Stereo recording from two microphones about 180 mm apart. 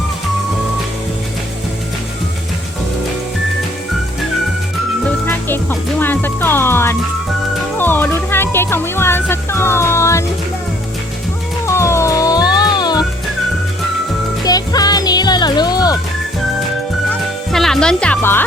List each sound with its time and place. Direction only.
5.0 s music: 10° left (ahead or behind)
7.8 s speech: 10° left (ahead or behind)
11.6 s music: 15° left (ahead or behind)
14.4 s music: 20° left (ahead or behind)
17.1 s music: centre (ahead or behind)